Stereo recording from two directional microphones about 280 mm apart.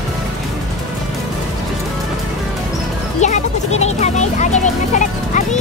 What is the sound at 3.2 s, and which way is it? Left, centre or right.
Music, left.